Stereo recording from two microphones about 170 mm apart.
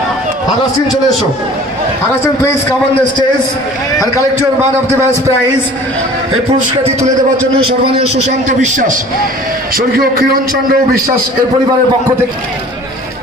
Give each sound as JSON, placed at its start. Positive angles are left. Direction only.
{"t": 6.8, "sound": "a man's voice", "side_deg": -40}
{"t": 9.8, "sound": "a man's voice", "side_deg": -60}